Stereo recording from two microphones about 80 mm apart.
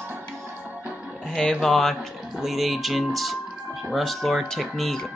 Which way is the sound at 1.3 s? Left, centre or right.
Centre.